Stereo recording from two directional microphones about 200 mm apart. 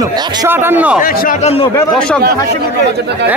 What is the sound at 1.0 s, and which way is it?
Speech, 45° left (ahead or behind).